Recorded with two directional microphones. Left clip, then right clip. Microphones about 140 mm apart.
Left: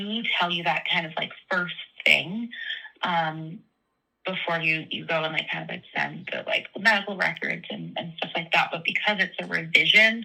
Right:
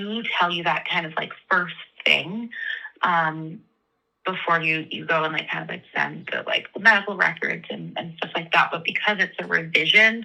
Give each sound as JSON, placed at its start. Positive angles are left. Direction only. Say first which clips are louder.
{"t": 0.0, "sound": "speech", "louder": "right 3 dB", "side_deg": 40}